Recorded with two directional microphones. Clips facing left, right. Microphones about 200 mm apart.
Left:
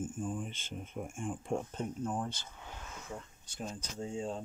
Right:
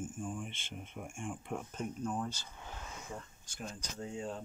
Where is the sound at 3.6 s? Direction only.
25° left (ahead or behind).